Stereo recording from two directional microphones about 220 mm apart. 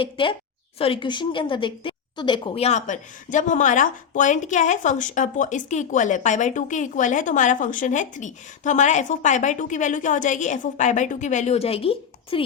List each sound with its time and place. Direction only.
0.0 s a woman's voice: 25° left (ahead or behind)